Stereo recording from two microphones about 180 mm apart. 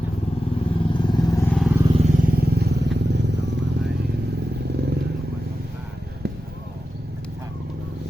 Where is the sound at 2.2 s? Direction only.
55° right (ahead or behind).